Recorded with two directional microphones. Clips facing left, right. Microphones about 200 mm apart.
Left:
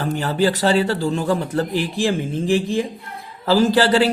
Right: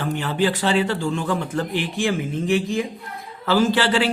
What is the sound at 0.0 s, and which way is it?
Speech, 40° left (ahead or behind).